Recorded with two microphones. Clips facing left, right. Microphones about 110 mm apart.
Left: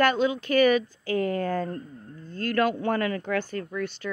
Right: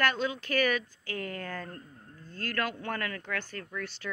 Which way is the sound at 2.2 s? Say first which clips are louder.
Left 8 dB; 5° right (ahead or behind).